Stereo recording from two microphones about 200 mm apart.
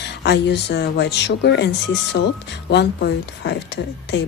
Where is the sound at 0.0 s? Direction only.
60° left (ahead or behind).